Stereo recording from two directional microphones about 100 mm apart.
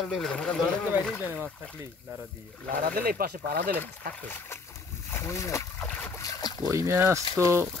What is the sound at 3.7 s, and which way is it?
Speech, 20° left (ahead or behind).